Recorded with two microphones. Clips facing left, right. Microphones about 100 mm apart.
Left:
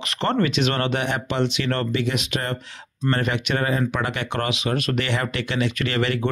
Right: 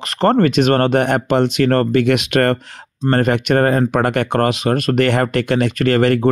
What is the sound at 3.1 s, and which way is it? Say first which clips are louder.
Speech: right 8 dB; 50° right (ahead or behind).